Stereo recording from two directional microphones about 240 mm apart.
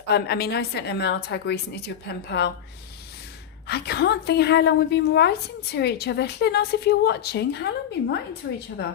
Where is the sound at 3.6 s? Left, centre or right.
Left.